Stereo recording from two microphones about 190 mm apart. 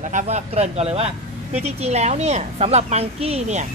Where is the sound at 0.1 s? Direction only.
35° right (ahead or behind).